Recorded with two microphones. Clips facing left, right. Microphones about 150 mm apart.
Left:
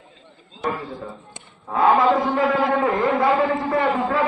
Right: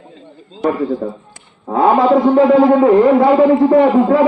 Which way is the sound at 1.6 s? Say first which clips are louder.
Right 5 dB; 35° right (ahead or behind).